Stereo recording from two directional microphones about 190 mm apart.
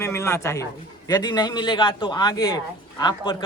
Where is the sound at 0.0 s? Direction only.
15° left (ahead or behind).